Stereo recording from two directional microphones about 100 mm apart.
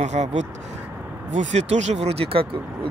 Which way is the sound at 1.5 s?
90° right.